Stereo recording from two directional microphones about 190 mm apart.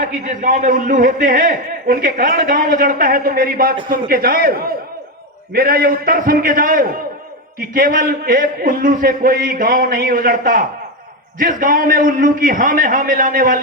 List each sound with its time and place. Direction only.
0.0 s a man's voice: 45° right (ahead or behind)